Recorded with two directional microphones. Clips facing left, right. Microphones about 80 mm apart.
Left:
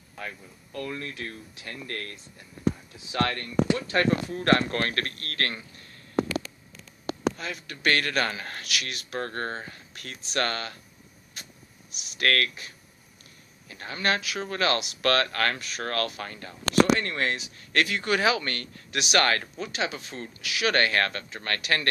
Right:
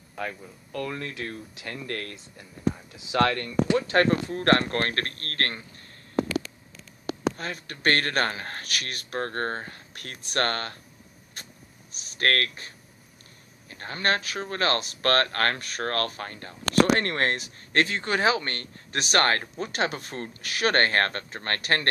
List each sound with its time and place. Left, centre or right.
0.7 s speech: right
3.0 s speech: right
3.7 s speech: right
7.3 s speech: right
11.9 s speech: right
17.7 s speech: right
19.6 s speech: right